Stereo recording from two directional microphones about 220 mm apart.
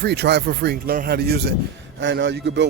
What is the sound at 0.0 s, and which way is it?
Speech, 50° right (ahead or behind).